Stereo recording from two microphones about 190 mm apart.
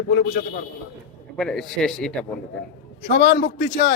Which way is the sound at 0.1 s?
50° left (ahead or behind).